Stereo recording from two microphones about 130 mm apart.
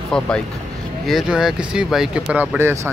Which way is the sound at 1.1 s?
5° right (ahead or behind).